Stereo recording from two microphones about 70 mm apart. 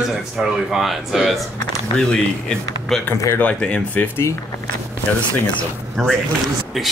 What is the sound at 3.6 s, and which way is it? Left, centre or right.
Speech, centre.